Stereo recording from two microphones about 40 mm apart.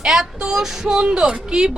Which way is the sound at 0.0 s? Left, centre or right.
Centre.